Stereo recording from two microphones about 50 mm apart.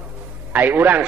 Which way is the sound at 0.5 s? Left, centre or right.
Right.